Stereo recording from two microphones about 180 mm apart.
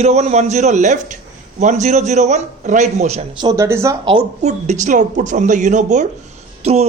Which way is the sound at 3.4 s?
20° right (ahead or behind).